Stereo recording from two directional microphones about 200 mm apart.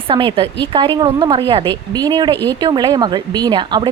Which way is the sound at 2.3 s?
10° left (ahead or behind).